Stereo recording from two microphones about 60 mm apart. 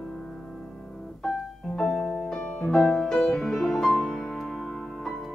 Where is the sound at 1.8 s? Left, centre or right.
Centre.